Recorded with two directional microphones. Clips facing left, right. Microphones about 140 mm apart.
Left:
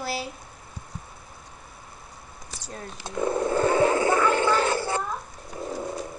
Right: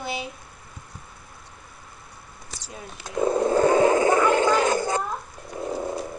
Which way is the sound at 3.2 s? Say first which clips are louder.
Right 4 dB; 25° right (ahead or behind).